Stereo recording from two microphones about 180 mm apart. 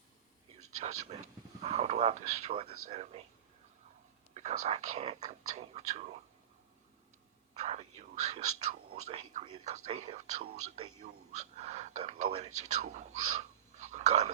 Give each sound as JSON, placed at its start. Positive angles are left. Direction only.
{"t": 0.5, "sound": "speech", "side_deg": -40}
{"t": 4.4, "sound": "speech", "side_deg": -40}
{"t": 7.5, "sound": "speech", "side_deg": -40}